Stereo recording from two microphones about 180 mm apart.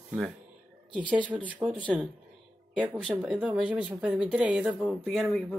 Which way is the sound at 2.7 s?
5° right (ahead or behind).